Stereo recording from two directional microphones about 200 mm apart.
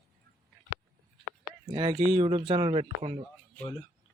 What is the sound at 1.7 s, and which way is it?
Speech, 20° right (ahead or behind).